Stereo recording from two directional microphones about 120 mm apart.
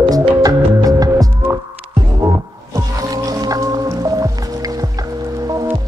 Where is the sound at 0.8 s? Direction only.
30° right (ahead or behind).